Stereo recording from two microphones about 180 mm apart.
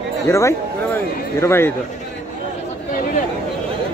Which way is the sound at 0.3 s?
15° left (ahead or behind).